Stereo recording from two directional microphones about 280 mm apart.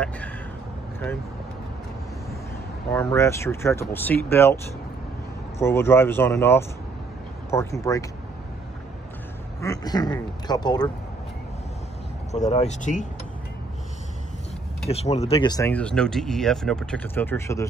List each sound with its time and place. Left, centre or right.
2.9 s speech: centre
5.6 s speech: centre
9.6 s speech: centre
12.3 s speech: left
14.9 s speech: left